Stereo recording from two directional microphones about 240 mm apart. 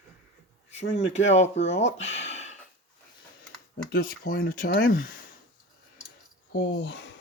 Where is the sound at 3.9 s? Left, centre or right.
Left.